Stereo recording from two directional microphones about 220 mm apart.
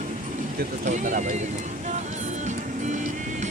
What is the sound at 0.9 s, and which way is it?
Speech, 35° right (ahead or behind).